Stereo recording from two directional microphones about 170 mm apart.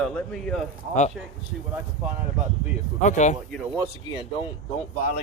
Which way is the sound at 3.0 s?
45° left (ahead or behind).